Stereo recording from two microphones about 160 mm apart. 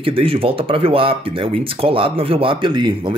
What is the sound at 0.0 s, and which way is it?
Speech, 35° right (ahead or behind).